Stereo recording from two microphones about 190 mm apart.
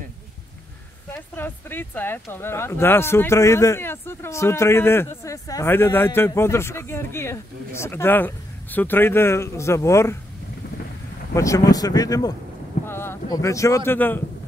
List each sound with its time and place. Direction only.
1.1 s speech: 10° left (ahead or behind)
11.3 s speech: 15° left (ahead or behind)